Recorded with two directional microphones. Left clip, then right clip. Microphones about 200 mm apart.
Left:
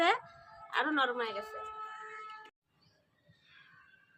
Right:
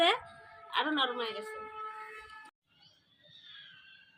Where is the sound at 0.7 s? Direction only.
5° left (ahead or behind).